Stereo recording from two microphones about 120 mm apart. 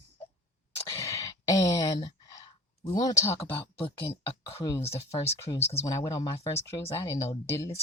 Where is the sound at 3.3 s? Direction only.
50° left (ahead or behind).